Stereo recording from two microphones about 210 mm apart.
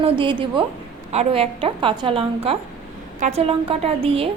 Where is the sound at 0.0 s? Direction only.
25° right (ahead or behind).